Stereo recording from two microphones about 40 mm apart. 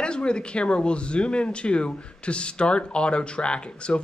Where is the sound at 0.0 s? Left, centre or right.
Left.